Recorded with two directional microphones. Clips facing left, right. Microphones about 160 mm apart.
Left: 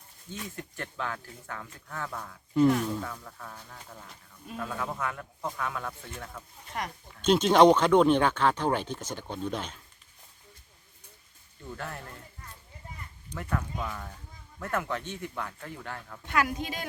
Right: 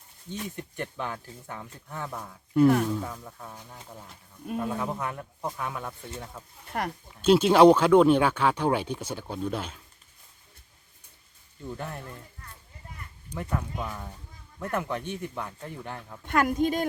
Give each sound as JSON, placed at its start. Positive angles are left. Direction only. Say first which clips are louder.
{"t": 0.3, "sound": "speech", "louder": "right 4 dB", "side_deg": -20}
{"t": 6.7, "sound": "speech", "louder": "right 5 dB", "side_deg": -60}
{"t": 7.2, "sound": "speech", "louder": "right 2 dB", "side_deg": -10}
{"t": 11.7, "sound": "speech", "louder": "right 2 dB", "side_deg": -15}
{"t": 13.5, "sound": "speech", "louder": "even", "side_deg": -15}
{"t": 16.2, "sound": "a woman's voice", "louder": "right 5 dB", "side_deg": -50}